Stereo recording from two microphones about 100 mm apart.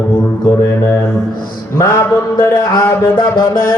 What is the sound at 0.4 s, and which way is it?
Music, 25° left (ahead or behind).